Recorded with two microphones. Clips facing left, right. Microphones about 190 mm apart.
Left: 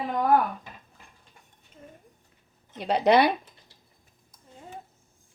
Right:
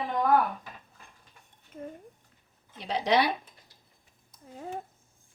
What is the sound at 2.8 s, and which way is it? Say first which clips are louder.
Speech: left 5 dB; 65° left (ahead or behind).